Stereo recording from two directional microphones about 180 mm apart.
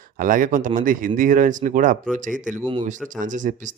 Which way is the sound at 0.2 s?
50° right (ahead or behind).